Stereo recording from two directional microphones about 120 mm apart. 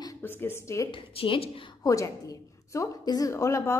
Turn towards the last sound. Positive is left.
turn(degrees=25)  # may be behind; listen again after turning